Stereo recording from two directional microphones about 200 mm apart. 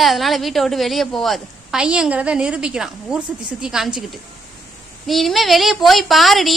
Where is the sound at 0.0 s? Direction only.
Centre (ahead or behind).